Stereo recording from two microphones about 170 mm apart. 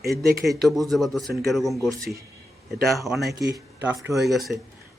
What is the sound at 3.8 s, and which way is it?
Speech, 15° right (ahead or behind).